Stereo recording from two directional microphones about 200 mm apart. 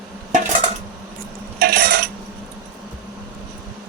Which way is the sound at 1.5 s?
50° right (ahead or behind).